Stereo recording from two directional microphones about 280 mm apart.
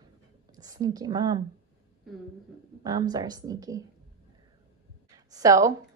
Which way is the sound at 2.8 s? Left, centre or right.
Centre.